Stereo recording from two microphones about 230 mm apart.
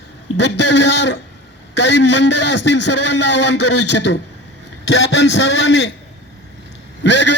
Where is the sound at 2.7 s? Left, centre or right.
Left.